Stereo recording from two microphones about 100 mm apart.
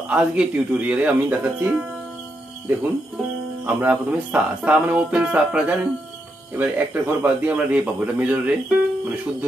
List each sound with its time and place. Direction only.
0.1 s speech: 10° right (ahead or behind)